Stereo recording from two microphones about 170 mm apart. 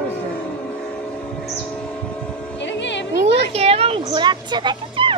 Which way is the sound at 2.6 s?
90° left.